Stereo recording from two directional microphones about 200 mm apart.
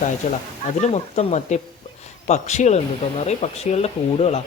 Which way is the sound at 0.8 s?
35° left (ahead or behind).